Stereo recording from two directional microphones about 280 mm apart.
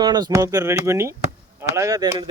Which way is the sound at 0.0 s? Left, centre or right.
Centre.